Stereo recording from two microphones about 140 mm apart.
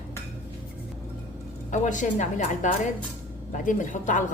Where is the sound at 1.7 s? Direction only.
60° left (ahead or behind).